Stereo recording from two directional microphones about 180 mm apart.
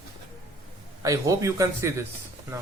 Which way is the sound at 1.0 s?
15° right (ahead or behind).